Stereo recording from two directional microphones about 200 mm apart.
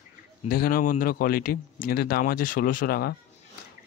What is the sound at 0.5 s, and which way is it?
Speech, 50° left (ahead or behind).